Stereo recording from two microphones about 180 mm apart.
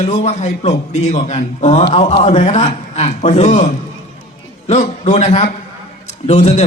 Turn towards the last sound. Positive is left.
turn(degrees=40)  # may be behind; listen again after turning